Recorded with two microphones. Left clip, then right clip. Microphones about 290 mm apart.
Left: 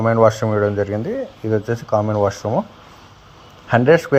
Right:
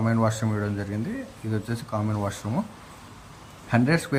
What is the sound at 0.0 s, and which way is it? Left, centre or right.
Speech, left.